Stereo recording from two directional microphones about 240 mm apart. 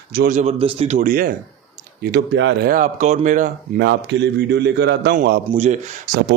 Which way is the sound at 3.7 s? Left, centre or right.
Right.